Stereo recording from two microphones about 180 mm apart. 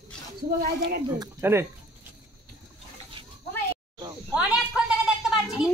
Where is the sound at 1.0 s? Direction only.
15° right (ahead or behind).